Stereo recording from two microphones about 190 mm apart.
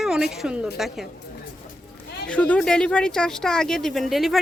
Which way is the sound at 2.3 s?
5° left (ahead or behind).